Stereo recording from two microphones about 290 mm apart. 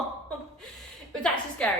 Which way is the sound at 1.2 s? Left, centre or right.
Centre.